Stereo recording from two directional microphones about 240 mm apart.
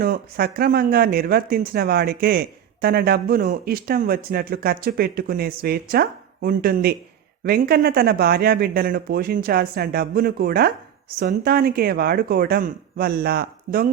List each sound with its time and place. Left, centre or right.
0.0 s speech: right